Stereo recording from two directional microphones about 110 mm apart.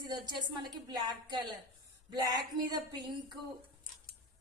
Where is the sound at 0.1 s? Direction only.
40° right (ahead or behind).